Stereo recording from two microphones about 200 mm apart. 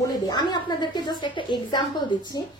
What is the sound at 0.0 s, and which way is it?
A woman's voice, 20° left (ahead or behind).